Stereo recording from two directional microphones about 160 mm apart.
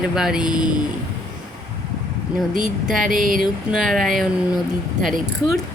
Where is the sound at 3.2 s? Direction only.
60° right (ahead or behind).